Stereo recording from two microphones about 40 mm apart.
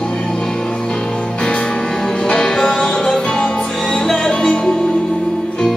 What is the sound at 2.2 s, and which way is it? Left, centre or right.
Music, centre.